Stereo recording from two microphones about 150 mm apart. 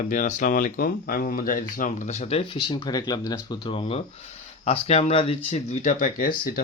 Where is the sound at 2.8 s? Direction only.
25° left (ahead or behind).